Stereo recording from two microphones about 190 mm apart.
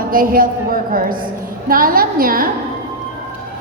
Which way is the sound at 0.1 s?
50° right (ahead or behind).